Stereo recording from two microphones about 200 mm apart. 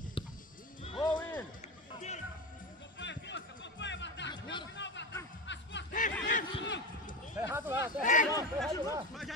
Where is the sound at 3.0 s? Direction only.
65° left (ahead or behind).